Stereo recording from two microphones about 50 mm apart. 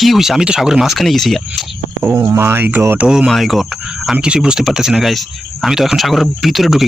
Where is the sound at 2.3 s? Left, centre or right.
Right.